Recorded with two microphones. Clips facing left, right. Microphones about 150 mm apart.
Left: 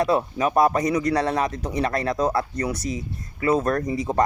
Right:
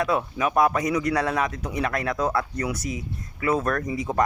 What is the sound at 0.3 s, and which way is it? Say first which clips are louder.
Speech: left 1 dB; 35° left (ahead or behind).